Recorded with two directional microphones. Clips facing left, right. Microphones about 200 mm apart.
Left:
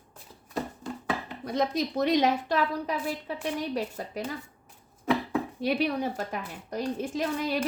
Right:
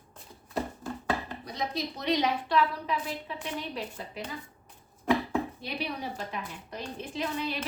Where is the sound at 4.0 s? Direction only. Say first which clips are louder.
Left 4 dB; 45° left (ahead or behind).